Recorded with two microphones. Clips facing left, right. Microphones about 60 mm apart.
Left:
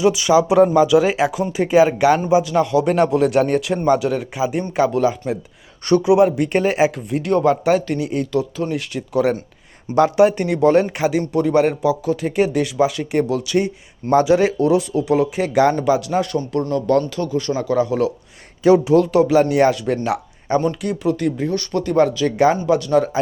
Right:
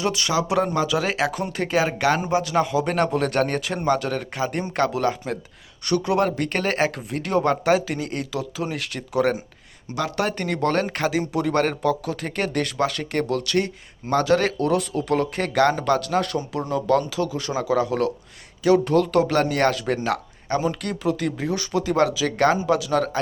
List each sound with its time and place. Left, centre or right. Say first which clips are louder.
0.0 s speech: left 8 dB; centre
0.6 s speech: left 10 dB; centre
2.4 s speech: left 5 dB; centre
20.1 s a sound: left 4 dB; centre
20.8 s speech: left 5 dB; centre